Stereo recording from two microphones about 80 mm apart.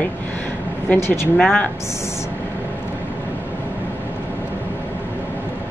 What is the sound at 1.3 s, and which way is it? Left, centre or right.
Speech, centre.